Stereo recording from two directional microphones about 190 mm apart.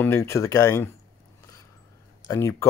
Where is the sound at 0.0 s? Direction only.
15° left (ahead or behind).